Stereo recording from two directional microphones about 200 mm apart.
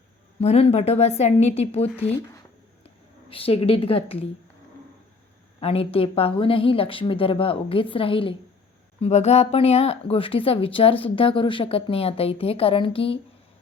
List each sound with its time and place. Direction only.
0.3 s a woman's voice: 30° left (ahead or behind)
2.0 s speech: 10° left (ahead or behind)
2.8 s speech: 30° left (ahead or behind)
5.5 s speech: 30° left (ahead or behind)